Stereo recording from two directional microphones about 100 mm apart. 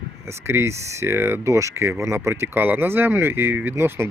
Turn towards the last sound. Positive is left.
turn(degrees=-25)  # may be behind; listen again after turning